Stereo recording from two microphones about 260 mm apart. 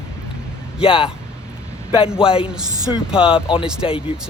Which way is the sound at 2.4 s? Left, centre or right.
Centre.